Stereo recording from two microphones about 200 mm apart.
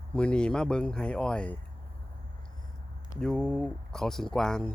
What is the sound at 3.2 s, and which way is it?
Speech, 5° left (ahead or behind).